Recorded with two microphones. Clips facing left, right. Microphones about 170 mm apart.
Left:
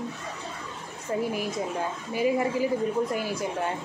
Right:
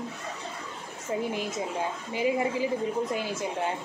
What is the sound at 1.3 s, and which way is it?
A woman's voice, 20° right (ahead or behind).